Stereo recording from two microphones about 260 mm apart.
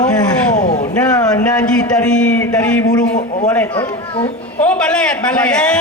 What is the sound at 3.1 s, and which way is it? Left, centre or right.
Speech, left.